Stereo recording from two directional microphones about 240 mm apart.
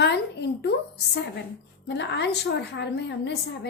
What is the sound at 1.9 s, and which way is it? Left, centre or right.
A woman's voice, left.